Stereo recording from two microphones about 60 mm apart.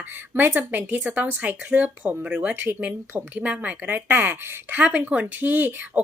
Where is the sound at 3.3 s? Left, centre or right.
Right.